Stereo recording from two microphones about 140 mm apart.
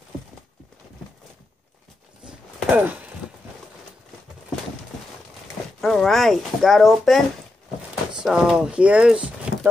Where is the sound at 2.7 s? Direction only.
15° right (ahead or behind).